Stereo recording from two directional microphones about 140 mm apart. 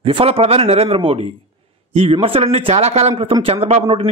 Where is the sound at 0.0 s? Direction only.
40° right (ahead or behind).